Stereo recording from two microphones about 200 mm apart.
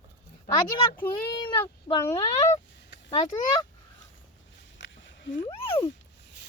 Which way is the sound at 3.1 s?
25° left (ahead or behind).